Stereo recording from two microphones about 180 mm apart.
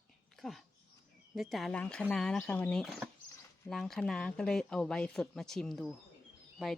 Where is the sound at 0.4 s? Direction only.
Centre (ahead or behind).